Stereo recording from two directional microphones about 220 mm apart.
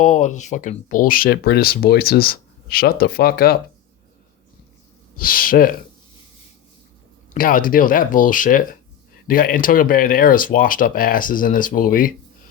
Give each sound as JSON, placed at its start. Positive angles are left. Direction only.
{"t": 0.0, "sound": "speech", "side_deg": 35}
{"t": 5.1, "sound": "speech", "side_deg": 40}
{"t": 7.3, "sound": "speech", "side_deg": 40}